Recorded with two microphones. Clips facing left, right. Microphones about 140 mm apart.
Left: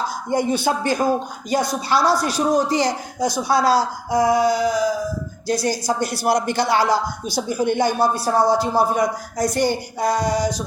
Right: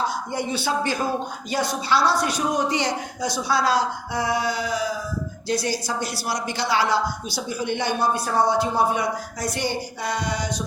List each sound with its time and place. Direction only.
0.3 s a woman's voice: 45° left (ahead or behind)